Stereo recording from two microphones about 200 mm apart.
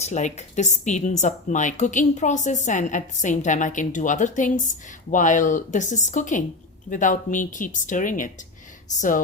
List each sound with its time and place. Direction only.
0.0 s a woman's voice: 35° left (ahead or behind)